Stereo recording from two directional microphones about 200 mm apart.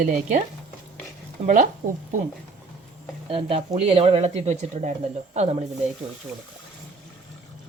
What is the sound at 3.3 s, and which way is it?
Speech, 25° right (ahead or behind).